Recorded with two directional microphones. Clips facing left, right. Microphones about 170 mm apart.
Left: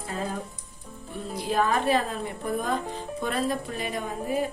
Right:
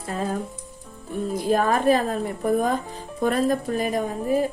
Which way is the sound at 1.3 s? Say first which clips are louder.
Right 4 dB; 45° right (ahead or behind).